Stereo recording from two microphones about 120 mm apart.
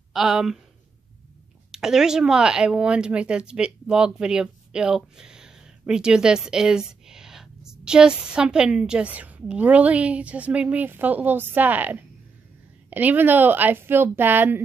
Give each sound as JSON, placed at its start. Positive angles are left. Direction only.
{"t": 0.1, "sound": "speech", "side_deg": -5}
{"t": 1.7, "sound": "speech", "side_deg": -5}